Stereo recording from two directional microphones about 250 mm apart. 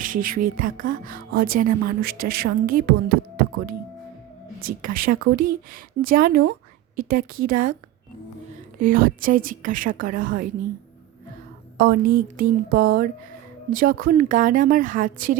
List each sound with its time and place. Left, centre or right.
0.0 s speech: right
4.6 s speech: right
8.8 s speech: right
11.8 s speech: right